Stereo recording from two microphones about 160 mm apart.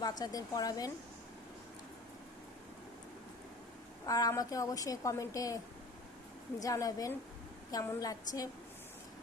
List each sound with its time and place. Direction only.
0.0 s a woman's voice: 25° left (ahead or behind)
4.0 s a woman's voice: 20° left (ahead or behind)
6.6 s a woman's voice: 20° left (ahead or behind)